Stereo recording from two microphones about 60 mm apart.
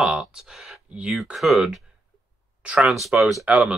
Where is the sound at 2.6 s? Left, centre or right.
Centre.